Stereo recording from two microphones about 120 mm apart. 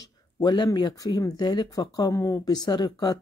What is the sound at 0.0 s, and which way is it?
Speech, 35° left (ahead or behind).